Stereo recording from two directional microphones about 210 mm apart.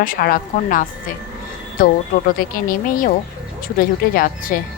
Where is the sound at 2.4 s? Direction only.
40° left (ahead or behind).